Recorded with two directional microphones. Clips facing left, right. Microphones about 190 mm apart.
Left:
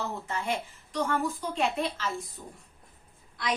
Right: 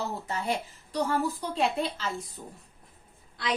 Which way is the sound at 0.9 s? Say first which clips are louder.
Right 1 dB; 35° right (ahead or behind).